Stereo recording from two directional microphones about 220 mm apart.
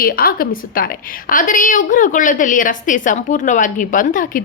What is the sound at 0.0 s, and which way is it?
A woman's voice, 40° left (ahead or behind).